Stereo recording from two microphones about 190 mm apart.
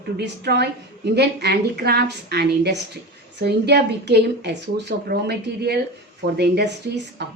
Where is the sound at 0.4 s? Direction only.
60° right (ahead or behind).